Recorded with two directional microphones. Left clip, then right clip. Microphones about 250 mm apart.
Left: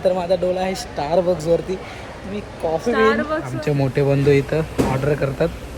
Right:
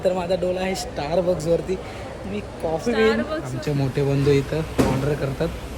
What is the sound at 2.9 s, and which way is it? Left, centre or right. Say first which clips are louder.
Speech: left 3 dB; left.